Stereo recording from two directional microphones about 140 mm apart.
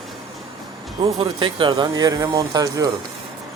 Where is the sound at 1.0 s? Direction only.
35° right (ahead or behind).